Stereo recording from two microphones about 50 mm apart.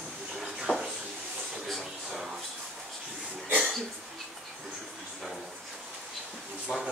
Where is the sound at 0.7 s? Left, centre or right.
Left.